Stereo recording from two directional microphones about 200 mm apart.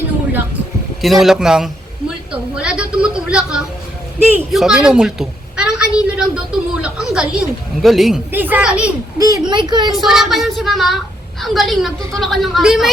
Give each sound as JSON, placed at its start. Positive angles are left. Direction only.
{"t": 1.0, "sound": "a woman's voice", "side_deg": 0}
{"t": 9.1, "sound": "speech", "side_deg": -20}
{"t": 9.9, "sound": "a woman's voice", "side_deg": 0}